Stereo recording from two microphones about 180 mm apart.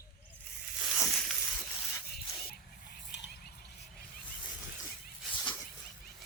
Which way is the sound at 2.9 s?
70° left (ahead or behind).